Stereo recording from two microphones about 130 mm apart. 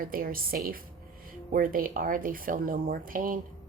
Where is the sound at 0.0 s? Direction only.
90° right.